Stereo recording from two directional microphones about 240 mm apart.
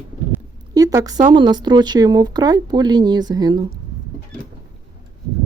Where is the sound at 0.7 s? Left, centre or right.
Centre.